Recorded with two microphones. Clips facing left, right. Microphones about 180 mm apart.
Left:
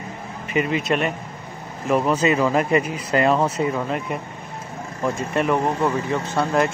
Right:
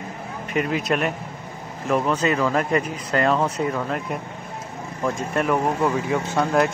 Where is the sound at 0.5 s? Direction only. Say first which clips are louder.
Left 1 dB; centre (ahead or behind).